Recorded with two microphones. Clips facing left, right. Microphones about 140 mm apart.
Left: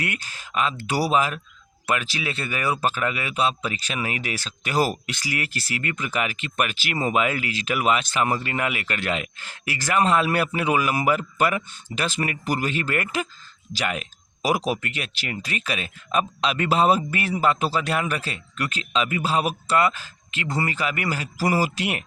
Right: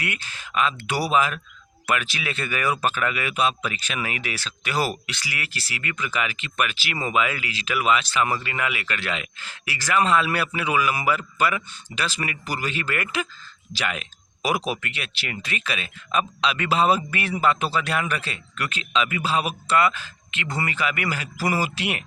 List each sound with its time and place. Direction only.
0.0 s speech: 40° left (ahead or behind)